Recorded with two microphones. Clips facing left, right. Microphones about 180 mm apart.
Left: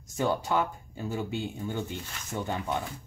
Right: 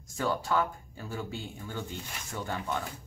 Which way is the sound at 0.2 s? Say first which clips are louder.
Left 2 dB; 20° left (ahead or behind).